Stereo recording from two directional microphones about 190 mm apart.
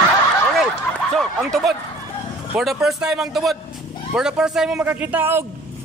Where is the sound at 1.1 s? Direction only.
Centre (ahead or behind).